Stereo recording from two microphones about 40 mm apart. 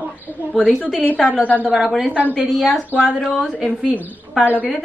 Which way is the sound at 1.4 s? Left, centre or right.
Left.